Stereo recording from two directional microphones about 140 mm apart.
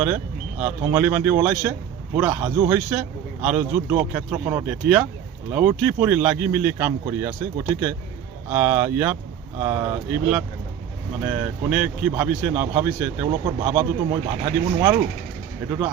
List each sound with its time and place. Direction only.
0.6 s speech: 15° right (ahead or behind)